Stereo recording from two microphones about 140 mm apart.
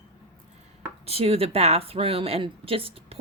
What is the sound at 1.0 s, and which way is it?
A woman's voice, 45° right (ahead or behind).